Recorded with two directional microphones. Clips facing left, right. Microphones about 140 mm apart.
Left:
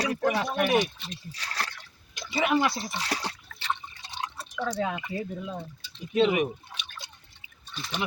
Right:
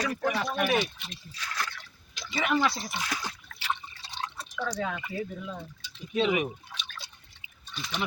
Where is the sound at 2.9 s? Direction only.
35° left (ahead or behind).